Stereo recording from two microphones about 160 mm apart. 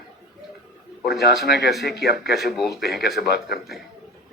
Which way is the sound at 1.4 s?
90° left.